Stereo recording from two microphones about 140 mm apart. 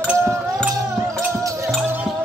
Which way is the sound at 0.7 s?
20° right (ahead or behind).